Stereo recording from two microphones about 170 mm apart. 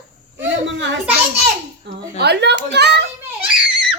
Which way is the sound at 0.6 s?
90° right.